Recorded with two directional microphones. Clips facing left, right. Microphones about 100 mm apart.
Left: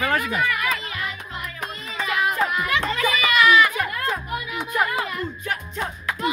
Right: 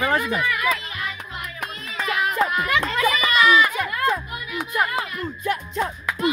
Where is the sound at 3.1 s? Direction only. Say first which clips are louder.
Left 1 dB; 30° right (ahead or behind).